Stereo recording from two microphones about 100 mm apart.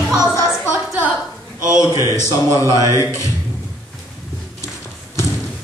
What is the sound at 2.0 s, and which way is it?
A man's voice, 35° left (ahead or behind).